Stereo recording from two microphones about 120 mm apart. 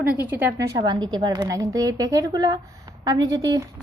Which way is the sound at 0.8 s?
40° right (ahead or behind).